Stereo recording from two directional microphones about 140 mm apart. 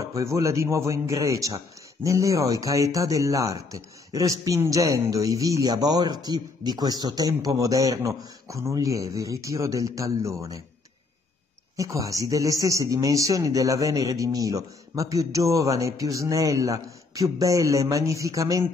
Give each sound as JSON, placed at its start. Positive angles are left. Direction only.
{"t": 0.0, "sound": "speech", "side_deg": -20}
{"t": 11.7, "sound": "speech", "side_deg": -25}